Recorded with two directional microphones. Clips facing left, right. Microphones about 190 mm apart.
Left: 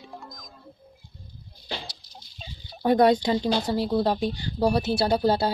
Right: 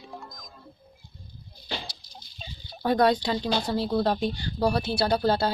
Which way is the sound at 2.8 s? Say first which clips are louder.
Left 3 dB; 20° left (ahead or behind).